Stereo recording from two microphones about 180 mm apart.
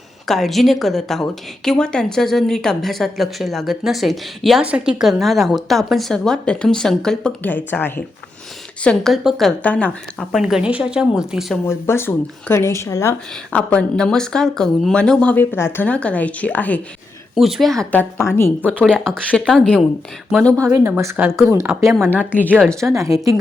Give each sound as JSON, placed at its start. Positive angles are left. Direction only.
{"t": 0.3, "sound": "speech", "side_deg": 0}
{"t": 11.6, "sound": "speech", "side_deg": 15}
{"t": 18.2, "sound": "speech", "side_deg": 15}
{"t": 20.6, "sound": "a woman's voice", "side_deg": -15}
{"t": 22.2, "sound": "speech", "side_deg": 10}
{"t": 22.8, "sound": "a woman's voice", "side_deg": -15}